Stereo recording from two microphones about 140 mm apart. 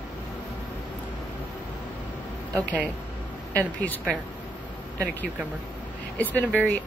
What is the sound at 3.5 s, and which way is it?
Speech, 10° left (ahead or behind).